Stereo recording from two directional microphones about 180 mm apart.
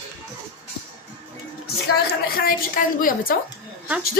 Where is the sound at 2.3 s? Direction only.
50° left (ahead or behind).